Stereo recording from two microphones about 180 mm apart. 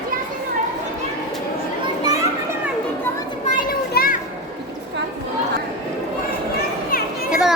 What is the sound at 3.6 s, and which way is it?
Children playing, 55° left (ahead or behind).